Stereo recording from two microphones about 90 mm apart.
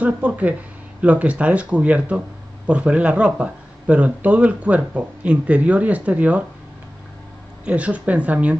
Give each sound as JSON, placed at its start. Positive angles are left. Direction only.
{"t": 0.0, "sound": "speech", "side_deg": -15}
{"t": 7.6, "sound": "speech", "side_deg": -15}